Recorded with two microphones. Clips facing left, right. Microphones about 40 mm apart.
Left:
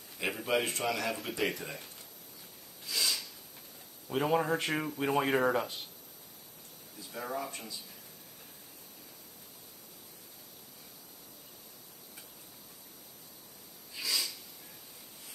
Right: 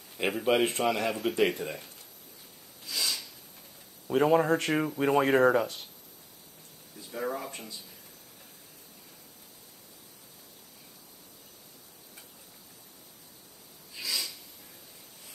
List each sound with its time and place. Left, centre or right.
0.4 s speech: centre
0.7 s a man's voice: right
1.6 s speech: centre
2.8 s a sound: centre
4.1 s speech: centre
7.1 s speech: centre
13.9 s snort: centre